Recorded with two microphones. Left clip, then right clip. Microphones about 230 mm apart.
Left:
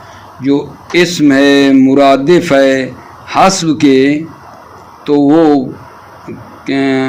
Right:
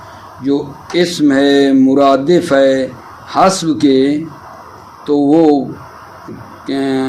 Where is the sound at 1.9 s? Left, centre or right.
Left.